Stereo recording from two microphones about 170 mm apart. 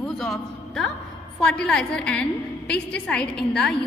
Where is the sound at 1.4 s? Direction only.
5° left (ahead or behind).